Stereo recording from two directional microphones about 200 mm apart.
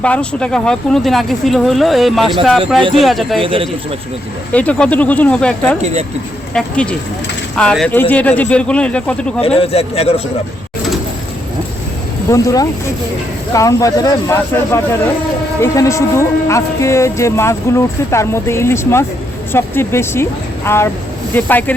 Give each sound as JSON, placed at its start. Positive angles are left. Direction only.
{"t": 0.0, "sound": "speech", "side_deg": 5}
{"t": 3.4, "sound": "a man's voice", "side_deg": -25}
{"t": 4.5, "sound": "speech", "side_deg": 5}
{"t": 5.8, "sound": "speech", "side_deg": -35}
{"t": 6.5, "sound": "speech", "side_deg": 5}
{"t": 9.6, "sound": "speech", "side_deg": 30}
{"t": 12.3, "sound": "speech", "side_deg": 15}